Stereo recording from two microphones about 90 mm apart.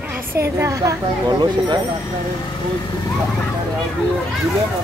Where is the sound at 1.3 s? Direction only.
55° right (ahead or behind).